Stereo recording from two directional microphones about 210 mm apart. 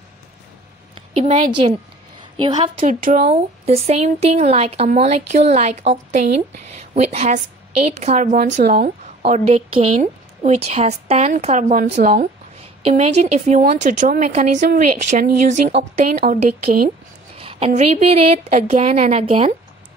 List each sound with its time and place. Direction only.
0.9 s a sound: 30° right (ahead or behind)
2.8 s a woman's voice: 40° right (ahead or behind)
3.3 s a woman's voice: 30° right (ahead or behind)
17.4 s a woman's voice: 25° right (ahead or behind)